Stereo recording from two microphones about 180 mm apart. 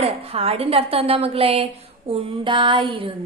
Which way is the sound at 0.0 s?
35° right (ahead or behind).